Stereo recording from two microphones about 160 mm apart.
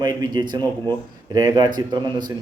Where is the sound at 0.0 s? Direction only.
25° right (ahead or behind).